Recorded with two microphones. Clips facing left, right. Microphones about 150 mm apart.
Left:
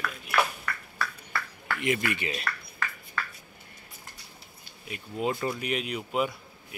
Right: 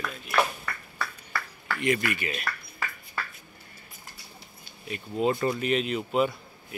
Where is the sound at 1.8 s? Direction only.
20° left (ahead or behind).